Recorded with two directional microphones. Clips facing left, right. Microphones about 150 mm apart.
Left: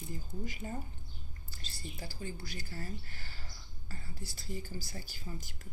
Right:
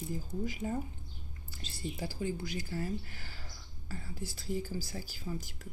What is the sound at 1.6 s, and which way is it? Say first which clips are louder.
Speech: right 7 dB; 20° right (ahead or behind).